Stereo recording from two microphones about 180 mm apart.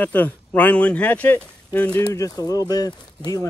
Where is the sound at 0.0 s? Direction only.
10° left (ahead or behind).